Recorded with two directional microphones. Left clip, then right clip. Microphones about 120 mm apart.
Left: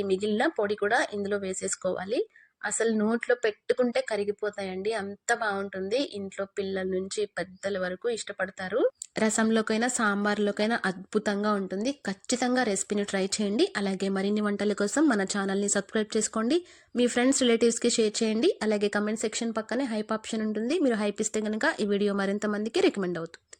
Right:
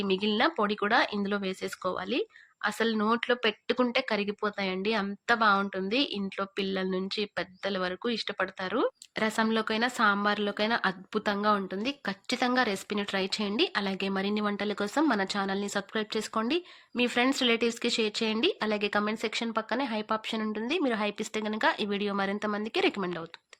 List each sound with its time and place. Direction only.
0.0 s a woman's voice: 45° left (ahead or behind)
9.1 s a woman's voice: 50° left (ahead or behind); by 23.2 s 35° left (ahead or behind)